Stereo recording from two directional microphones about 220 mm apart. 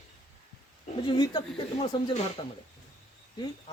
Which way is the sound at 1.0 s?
20° left (ahead or behind).